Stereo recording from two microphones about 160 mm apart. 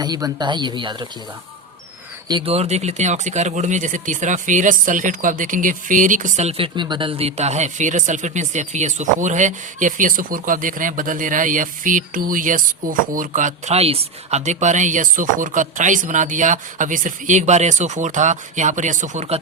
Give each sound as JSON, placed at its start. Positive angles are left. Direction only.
{"t": 0.0, "sound": "speech", "side_deg": -25}
{"t": 2.2, "sound": "speech", "side_deg": -30}